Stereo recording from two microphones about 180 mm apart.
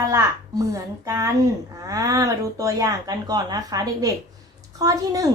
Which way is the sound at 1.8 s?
20° right (ahead or behind).